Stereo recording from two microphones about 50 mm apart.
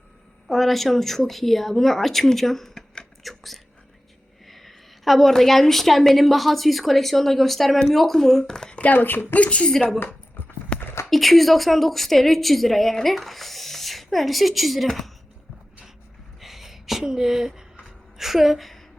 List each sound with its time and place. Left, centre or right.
0.4 s speech: centre
3.2 s whispering: centre
4.4 s a woman's voice: centre
8.8 s speech: left
9.3 s a woman's voice: left
10.7 s clip-clop: left
11.1 s a woman's voice: centre
16.4 s a sound: centre
17.0 s a woman's voice: centre